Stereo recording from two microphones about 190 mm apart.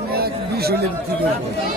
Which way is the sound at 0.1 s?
55° right (ahead or behind).